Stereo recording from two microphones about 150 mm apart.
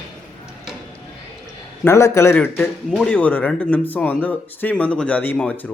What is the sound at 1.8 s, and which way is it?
A man's voice, 20° left (ahead or behind).